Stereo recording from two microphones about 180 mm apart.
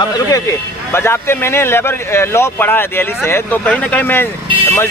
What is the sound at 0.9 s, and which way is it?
A man's voice, 15° left (ahead or behind).